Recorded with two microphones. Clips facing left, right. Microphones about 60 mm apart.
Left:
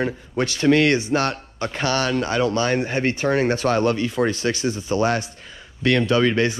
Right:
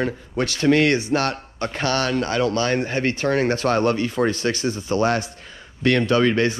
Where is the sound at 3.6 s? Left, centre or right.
Right.